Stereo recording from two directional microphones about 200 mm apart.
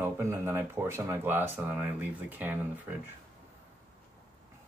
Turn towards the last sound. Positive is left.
turn(degrees=-10)  # may be behind; listen again after turning